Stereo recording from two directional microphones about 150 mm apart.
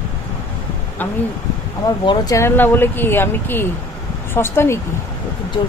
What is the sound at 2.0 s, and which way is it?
Speech, 20° left (ahead or behind).